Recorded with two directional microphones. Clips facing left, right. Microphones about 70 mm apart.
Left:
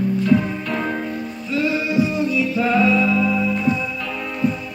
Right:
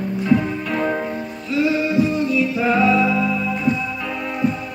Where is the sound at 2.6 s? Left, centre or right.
Centre.